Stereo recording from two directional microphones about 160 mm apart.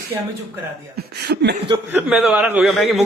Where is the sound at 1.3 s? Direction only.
90° right.